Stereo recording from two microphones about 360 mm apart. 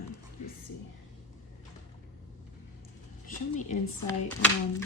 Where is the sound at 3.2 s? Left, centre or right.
Left.